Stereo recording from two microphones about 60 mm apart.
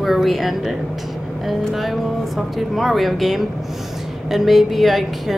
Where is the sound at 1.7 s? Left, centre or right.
Centre.